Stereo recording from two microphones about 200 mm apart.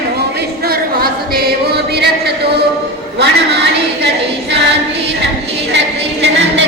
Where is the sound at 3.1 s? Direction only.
55° right (ahead or behind).